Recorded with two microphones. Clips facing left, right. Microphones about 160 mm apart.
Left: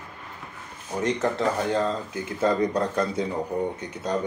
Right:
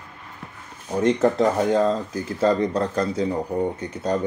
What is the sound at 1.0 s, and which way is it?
Speech, 35° right (ahead or behind).